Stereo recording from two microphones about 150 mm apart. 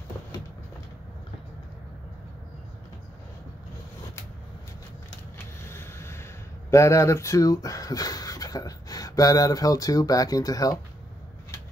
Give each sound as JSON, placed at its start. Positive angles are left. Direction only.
{"t": 5.6, "sound": "vehicle", "side_deg": 15}
{"t": 6.7, "sound": "speech", "side_deg": 20}